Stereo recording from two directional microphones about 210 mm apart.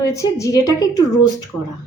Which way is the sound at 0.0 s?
15° left (ahead or behind).